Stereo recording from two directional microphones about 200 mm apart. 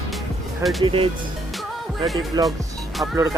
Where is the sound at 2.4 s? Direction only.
20° right (ahead or behind).